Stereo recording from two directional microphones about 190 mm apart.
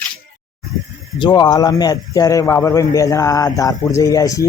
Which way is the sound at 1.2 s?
25° left (ahead or behind).